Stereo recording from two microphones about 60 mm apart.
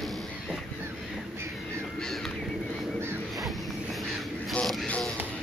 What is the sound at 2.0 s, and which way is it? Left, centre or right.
Bird, centre.